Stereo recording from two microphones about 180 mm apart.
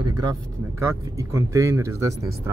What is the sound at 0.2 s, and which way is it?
Speech, 20° right (ahead or behind).